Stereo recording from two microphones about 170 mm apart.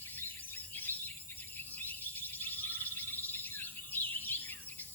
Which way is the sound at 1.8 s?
10° left (ahead or behind).